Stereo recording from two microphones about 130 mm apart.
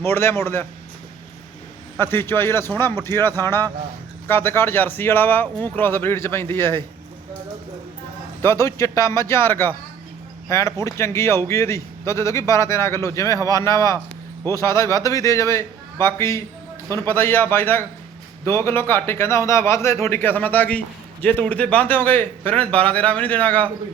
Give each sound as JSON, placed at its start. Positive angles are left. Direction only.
{"t": 0.0, "sound": "a man's voice", "side_deg": 20}
{"t": 2.0, "sound": "a man's voice", "side_deg": 15}
{"t": 8.4, "sound": "a man's voice", "side_deg": 20}